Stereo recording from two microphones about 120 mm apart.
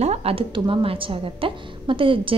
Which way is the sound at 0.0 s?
60° right (ahead or behind).